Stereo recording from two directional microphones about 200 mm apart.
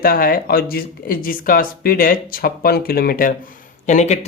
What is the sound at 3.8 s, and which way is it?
Speech, 35° left (ahead or behind).